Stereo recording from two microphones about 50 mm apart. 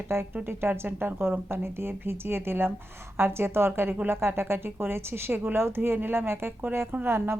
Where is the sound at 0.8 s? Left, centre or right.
Right.